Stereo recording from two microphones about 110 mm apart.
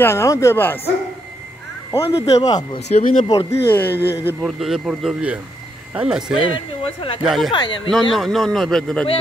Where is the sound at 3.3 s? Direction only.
30° left (ahead or behind).